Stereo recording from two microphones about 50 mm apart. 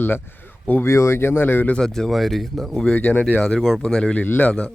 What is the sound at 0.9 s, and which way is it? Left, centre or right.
Speech, left.